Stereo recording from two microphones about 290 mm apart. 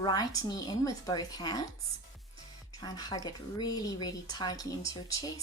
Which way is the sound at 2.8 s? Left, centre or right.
Centre.